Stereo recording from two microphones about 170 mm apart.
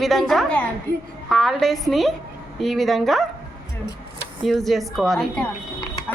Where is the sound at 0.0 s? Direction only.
Centre (ahead or behind).